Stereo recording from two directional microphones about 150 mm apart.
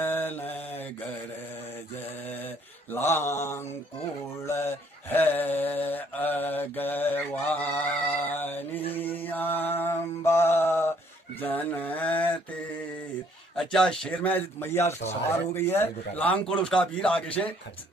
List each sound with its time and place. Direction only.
0.0 s mantra: 10° left (ahead or behind)
2.9 s mantra: 15° left (ahead or behind)
13.6 s speech: 5° left (ahead or behind)